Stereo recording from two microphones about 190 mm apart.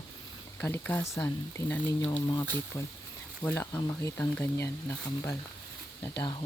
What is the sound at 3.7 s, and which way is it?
Speech, 20° left (ahead or behind).